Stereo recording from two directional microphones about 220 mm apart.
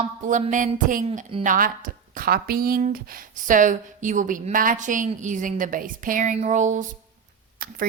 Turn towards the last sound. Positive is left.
turn(degrees=-40)  # may be behind; listen again after turning